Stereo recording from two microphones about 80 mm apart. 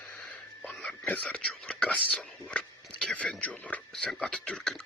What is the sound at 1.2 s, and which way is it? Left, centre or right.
Speech, centre.